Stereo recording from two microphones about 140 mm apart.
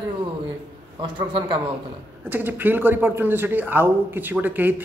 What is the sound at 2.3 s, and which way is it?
Speech, 15° right (ahead or behind).